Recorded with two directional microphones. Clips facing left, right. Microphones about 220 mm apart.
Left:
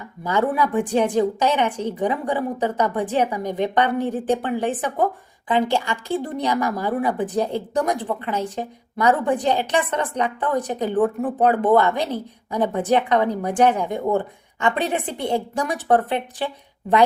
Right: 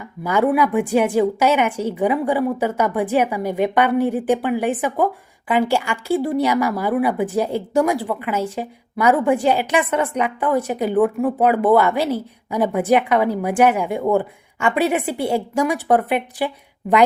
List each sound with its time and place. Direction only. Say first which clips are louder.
0.3 s a woman's voice: right 4 dB; 10° right (ahead or behind)